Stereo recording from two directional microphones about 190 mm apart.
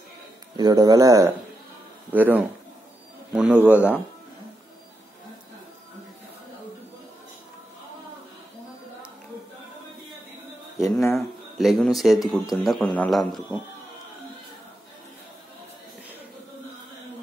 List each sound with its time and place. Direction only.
0.6 s a man's voice: 20° right (ahead or behind)
11.0 s speech: centre (ahead or behind)